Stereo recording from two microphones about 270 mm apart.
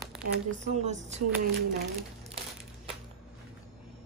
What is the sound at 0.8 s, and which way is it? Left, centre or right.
Speech, right.